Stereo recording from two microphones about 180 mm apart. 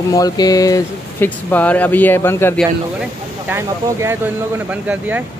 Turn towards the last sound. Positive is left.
turn(degrees=-5)  # may be behind; listen again after turning